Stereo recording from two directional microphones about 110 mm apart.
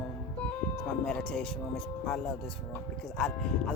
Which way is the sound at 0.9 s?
10° left (ahead or behind).